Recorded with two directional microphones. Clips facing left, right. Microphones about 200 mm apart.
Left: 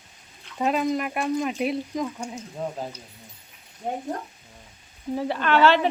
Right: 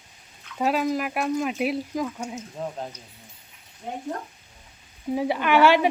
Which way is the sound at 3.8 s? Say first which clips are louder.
Left 4 dB; 45° left (ahead or behind).